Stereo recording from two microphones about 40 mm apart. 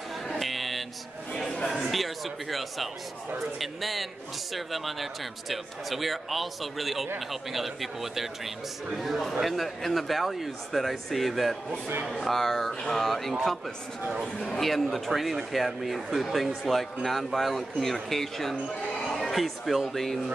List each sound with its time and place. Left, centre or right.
0.3 s a sound: centre
1.4 s chatter: centre
1.9 s speech: centre
14.6 s speech: centre